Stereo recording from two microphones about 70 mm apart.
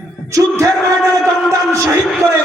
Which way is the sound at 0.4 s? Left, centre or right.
Right.